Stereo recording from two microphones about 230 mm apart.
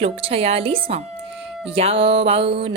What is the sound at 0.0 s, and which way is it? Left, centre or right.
Music, right.